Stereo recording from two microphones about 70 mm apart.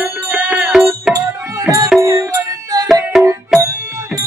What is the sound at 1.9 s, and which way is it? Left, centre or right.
Music, right.